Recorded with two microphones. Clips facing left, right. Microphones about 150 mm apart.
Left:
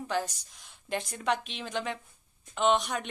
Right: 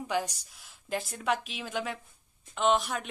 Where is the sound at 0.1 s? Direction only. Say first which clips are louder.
Right 1 dB; 10° right (ahead or behind).